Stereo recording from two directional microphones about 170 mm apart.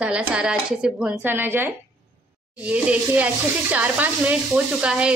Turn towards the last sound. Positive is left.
turn(degrees=-5)  # may be behind; listen again after turning